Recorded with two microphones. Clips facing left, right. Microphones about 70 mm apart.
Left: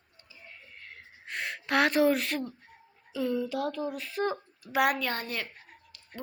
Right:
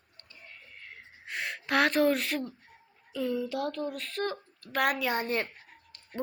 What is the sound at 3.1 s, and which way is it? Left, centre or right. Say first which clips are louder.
Speech: left 1 dB; centre.